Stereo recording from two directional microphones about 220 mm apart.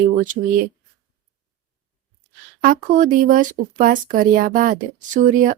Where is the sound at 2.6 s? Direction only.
40° right (ahead or behind).